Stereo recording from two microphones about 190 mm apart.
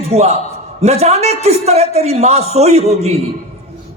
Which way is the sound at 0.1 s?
35° right (ahead or behind).